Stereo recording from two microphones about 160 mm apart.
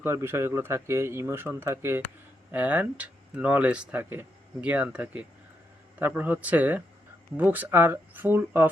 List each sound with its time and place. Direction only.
0.0 s speech: 15° right (ahead or behind)